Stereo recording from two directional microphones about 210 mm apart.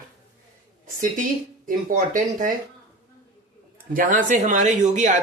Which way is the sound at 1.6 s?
40° right (ahead or behind).